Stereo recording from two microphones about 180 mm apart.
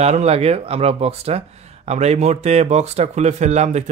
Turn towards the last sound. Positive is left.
turn(degrees=-40)  # may be behind; listen again after turning